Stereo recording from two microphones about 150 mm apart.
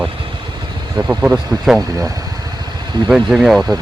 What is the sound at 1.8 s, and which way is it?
Speech, 25° right (ahead or behind).